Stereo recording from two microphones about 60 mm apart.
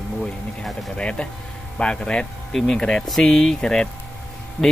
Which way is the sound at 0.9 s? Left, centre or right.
Centre.